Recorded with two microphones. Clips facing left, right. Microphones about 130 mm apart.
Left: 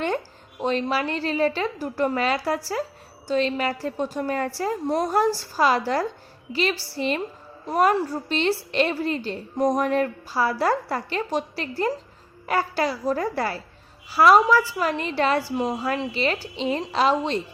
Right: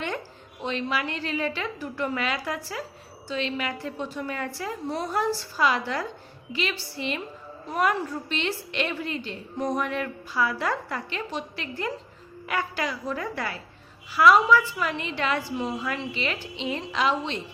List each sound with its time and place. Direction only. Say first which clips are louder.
0.0 s a woman's voice: left 6 dB; 35° left (ahead or behind)